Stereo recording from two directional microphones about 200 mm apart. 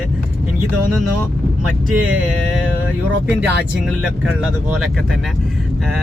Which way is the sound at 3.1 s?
60° right (ahead or behind).